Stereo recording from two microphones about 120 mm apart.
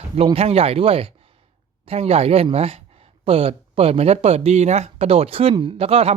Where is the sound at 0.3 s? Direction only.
55° right (ahead or behind).